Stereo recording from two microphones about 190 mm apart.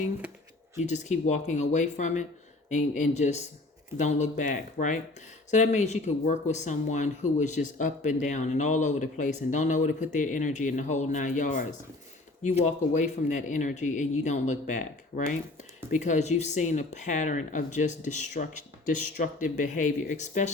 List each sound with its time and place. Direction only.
0.8 s speech: 40° left (ahead or behind)